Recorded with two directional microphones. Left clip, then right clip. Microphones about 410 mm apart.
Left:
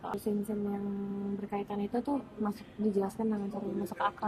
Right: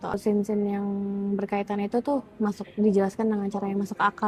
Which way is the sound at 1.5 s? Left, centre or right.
Right.